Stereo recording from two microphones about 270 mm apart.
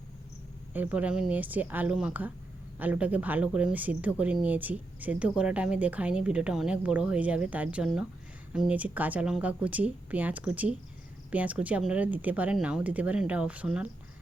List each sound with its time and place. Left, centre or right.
0.7 s a woman's voice: centre